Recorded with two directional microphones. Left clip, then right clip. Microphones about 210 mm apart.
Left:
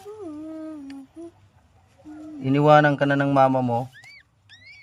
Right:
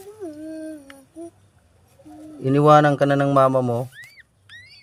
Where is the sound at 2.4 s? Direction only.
35° right (ahead or behind).